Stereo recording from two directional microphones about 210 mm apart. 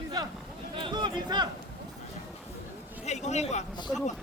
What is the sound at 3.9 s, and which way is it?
Speech, 10° left (ahead or behind).